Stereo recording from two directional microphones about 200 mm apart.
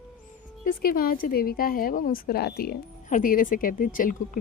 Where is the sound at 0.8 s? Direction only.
45° left (ahead or behind).